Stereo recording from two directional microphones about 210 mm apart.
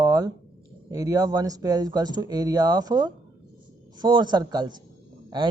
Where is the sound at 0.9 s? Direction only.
15° right (ahead or behind).